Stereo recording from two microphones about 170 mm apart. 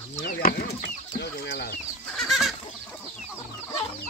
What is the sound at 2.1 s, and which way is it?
Chicken, centre (ahead or behind).